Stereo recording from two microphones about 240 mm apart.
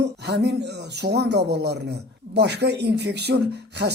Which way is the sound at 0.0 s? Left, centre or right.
Right.